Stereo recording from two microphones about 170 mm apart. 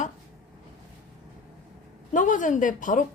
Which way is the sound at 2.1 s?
50° left (ahead or behind).